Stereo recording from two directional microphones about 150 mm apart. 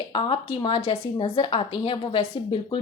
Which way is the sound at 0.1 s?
35° left (ahead or behind).